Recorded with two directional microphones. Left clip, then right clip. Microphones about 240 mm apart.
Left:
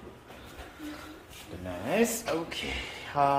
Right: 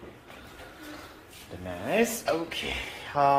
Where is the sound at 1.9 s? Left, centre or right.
Centre.